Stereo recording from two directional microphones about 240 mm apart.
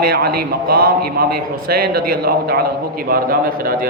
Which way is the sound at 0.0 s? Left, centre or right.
Right.